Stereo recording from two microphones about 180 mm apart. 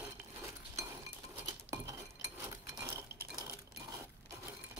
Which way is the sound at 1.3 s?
15° right (ahead or behind).